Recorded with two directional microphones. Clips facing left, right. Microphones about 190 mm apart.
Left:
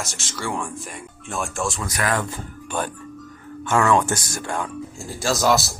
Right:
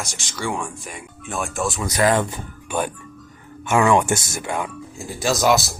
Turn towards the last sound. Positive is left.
turn(degrees=-20)  # may be behind; listen again after turning